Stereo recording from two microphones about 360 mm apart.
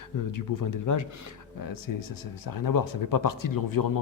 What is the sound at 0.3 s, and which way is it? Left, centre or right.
Speech, left.